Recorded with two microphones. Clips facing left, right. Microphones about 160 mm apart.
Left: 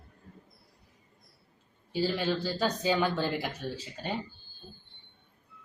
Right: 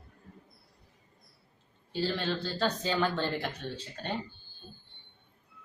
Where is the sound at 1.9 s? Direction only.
10° left (ahead or behind).